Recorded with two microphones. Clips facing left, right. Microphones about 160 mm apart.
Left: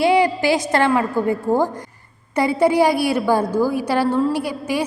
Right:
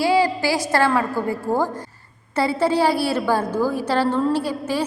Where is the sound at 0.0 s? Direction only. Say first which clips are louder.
Left 2 dB; 20° left (ahead or behind).